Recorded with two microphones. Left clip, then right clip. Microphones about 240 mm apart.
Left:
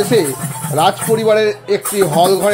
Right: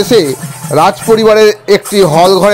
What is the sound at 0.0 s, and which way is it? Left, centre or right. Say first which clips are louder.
Speech: right 6 dB; right.